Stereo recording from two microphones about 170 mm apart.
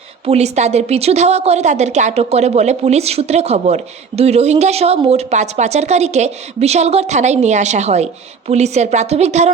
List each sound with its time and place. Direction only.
0.3 s a woman's voice: 40° right (ahead or behind)